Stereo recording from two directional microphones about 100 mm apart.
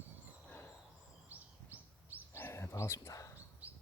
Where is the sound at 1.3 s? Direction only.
15° right (ahead or behind).